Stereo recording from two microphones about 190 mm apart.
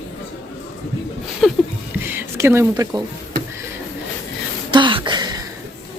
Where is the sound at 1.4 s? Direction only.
Centre (ahead or behind).